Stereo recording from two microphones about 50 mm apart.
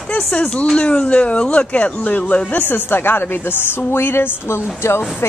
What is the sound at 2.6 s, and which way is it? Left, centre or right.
A woman's voice, left.